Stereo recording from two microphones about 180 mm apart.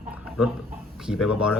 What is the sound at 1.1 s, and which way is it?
Speech, 5° right (ahead or behind).